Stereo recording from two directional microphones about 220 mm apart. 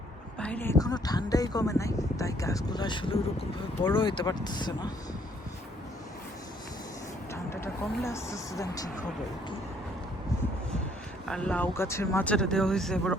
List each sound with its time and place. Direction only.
0.3 s speech: 5° left (ahead or behind)
7.5 s speech: 10° left (ahead or behind)
11.3 s speech: 5° left (ahead or behind)